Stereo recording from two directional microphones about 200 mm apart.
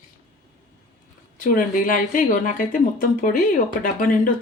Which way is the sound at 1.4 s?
40° left (ahead or behind).